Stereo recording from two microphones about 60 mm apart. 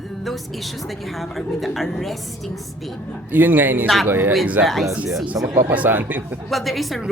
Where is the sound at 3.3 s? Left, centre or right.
Right.